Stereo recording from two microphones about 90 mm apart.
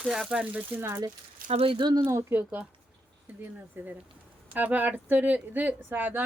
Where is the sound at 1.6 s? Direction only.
80° right.